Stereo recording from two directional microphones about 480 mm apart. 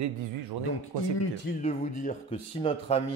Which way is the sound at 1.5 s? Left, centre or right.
Left.